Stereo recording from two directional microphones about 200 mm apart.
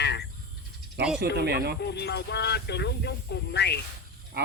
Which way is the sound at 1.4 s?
55° right (ahead or behind).